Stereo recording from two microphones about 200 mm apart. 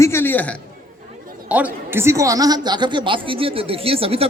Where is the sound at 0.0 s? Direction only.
10° left (ahead or behind).